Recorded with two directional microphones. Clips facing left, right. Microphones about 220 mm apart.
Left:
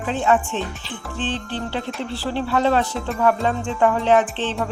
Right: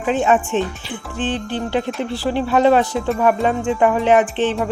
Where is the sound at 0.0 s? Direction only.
15° right (ahead or behind).